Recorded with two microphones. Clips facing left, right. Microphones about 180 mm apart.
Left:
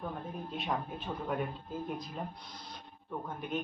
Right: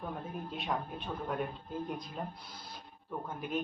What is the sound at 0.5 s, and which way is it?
Speech, centre (ahead or behind).